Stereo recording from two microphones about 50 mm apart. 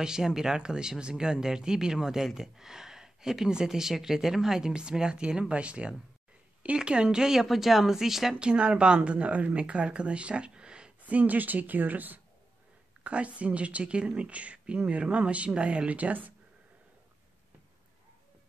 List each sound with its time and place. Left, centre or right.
0.0 s speech: centre
8.4 s a woman's voice: centre
11.0 s a woman's voice: right
13.0 s a woman's voice: right